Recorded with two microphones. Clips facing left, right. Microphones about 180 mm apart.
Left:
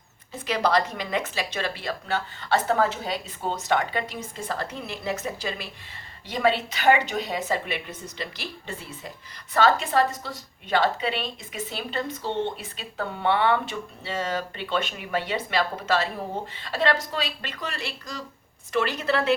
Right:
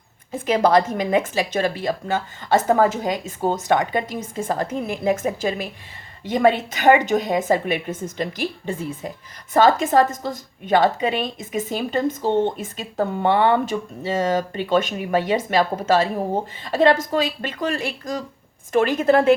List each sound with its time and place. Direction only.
0.3 s a woman's voice: 50° right (ahead or behind)